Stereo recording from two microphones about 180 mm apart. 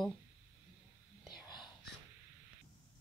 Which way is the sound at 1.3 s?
25° left (ahead or behind).